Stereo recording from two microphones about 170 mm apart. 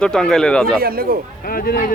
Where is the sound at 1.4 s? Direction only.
60° left (ahead or behind).